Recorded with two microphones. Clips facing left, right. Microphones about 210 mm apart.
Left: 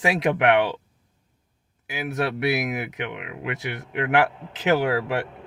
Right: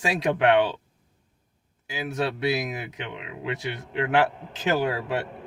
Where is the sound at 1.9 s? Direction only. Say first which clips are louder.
Left 2 dB; 20° left (ahead or behind).